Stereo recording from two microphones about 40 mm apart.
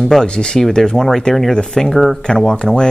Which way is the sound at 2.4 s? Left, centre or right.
Centre.